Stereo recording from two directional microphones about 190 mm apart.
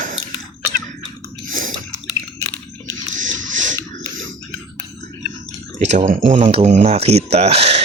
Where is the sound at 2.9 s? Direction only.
40° right (ahead or behind).